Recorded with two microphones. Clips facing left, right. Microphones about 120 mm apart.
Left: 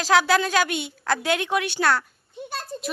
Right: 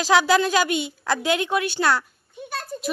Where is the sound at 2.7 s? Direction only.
25° left (ahead or behind).